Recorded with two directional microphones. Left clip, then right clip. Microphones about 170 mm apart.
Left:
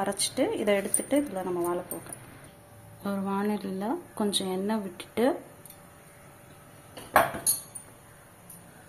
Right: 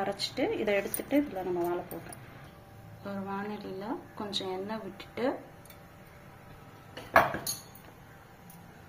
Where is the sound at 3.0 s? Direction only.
55° left (ahead or behind).